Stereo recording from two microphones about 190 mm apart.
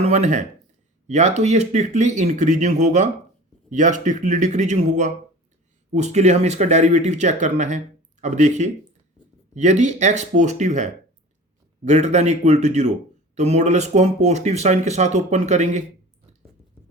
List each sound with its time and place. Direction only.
0.0 s speech: 35° right (ahead or behind)